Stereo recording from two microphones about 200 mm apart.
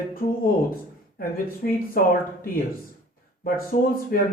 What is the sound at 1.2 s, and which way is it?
Speech, 45° left (ahead or behind).